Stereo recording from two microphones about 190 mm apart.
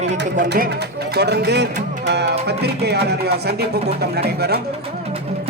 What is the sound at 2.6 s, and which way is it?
Speech, 60° right (ahead or behind).